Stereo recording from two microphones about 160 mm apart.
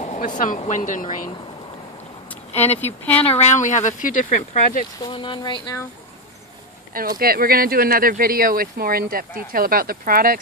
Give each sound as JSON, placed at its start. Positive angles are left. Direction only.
{"t": 0.0, "sound": "a sound", "side_deg": 45}
{"t": 0.7, "sound": "speech", "side_deg": 55}
{"t": 2.5, "sound": "speech", "side_deg": 40}
{"t": 2.8, "sound": "speech", "side_deg": 10}
{"t": 3.3, "sound": "speech", "side_deg": 45}
{"t": 5.0, "sound": "speech", "side_deg": 30}
{"t": 6.9, "sound": "speech", "side_deg": -65}